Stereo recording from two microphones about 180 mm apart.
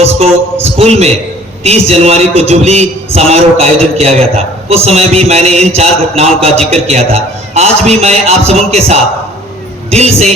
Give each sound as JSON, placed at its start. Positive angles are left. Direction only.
{"t": 0.6, "sound": "a man's voice", "side_deg": -35}